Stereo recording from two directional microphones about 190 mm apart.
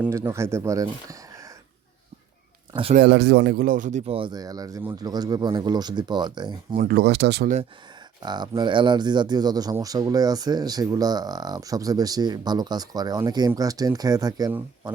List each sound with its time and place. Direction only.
0.0 s speech: 15° right (ahead or behind)
1.3 s a sound: 15° right (ahead or behind)
2.9 s speech: 60° right (ahead or behind); by 6.7 s 25° right (ahead or behind)
6.7 s speech: 55° right (ahead or behind)
8.2 s speech: 20° right (ahead or behind)